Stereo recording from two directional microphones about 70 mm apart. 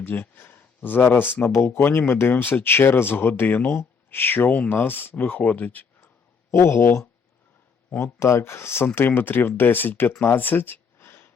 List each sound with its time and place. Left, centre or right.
0.0 s speech: left
6.5 s speech: left
8.0 s speech: left
10.3 s a sound: left